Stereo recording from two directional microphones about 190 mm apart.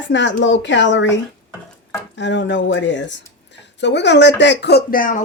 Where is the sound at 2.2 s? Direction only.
70° left (ahead or behind).